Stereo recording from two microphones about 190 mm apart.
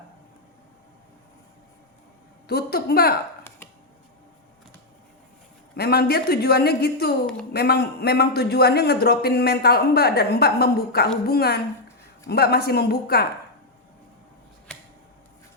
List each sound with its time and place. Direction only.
2.5 s a man's voice: 55° left (ahead or behind)
5.7 s a man's voice: 55° left (ahead or behind)